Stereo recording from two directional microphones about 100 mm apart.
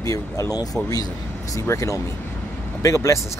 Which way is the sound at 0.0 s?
35° left (ahead or behind).